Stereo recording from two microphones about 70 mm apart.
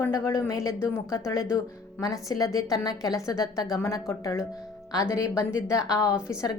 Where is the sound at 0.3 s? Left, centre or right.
Left.